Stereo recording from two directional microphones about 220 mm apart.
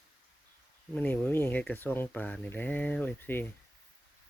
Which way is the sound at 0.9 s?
10° left (ahead or behind).